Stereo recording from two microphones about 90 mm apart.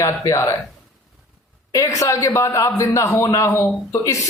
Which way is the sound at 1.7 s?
40° left (ahead or behind).